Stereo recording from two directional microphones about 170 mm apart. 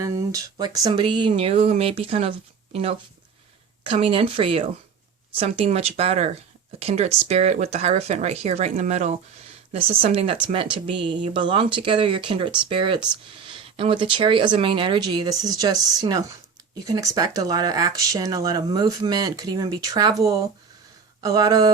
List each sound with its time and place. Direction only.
0.0 s speech: 20° right (ahead or behind)
3.8 s speech: 30° right (ahead or behind)
9.7 s speech: 35° right (ahead or behind)